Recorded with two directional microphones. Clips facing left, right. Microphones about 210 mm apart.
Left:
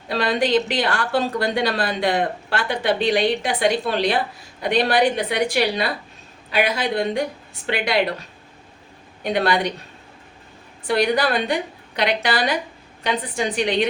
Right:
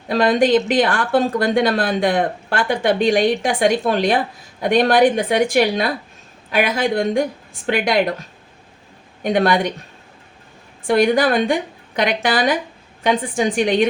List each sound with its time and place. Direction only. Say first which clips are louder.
0.1 s a woman's voice: right 5 dB; 50° right (ahead or behind)
9.2 s a woman's voice: right 4 dB; 45° right (ahead or behind)
10.8 s a woman's voice: right 4 dB; 50° right (ahead or behind)